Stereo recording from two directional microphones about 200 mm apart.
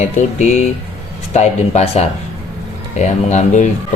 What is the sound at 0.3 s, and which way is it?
Speech, 35° left (ahead or behind).